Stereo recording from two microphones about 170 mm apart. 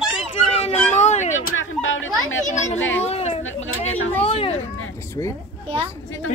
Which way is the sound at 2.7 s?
35° left (ahead or behind).